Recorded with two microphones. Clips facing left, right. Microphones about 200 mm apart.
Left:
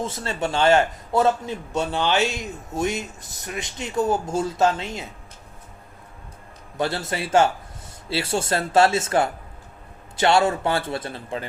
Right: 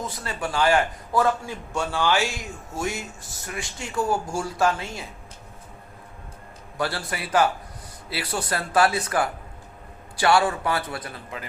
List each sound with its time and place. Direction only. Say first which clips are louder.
0.0 s a man's voice: left 4 dB; 25° left (ahead or behind)
6.7 s a man's voice: left 3 dB; 20° left (ahead or behind)